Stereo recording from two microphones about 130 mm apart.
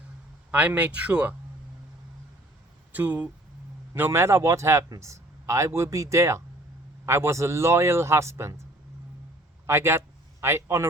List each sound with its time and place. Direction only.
0.5 s speech: 10° right (ahead or behind)
2.9 s a man's voice: 10° right (ahead or behind)
9.6 s a man's voice: 20° right (ahead or behind)